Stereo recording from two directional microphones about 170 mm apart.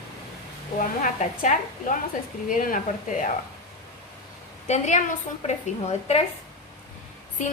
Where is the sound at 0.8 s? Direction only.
50° left (ahead or behind).